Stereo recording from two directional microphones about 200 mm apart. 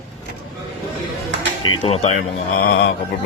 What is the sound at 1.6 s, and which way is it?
Speech, 25° left (ahead or behind).